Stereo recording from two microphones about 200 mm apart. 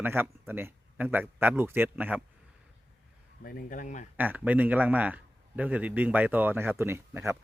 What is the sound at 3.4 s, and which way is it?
Speech, 45° left (ahead or behind).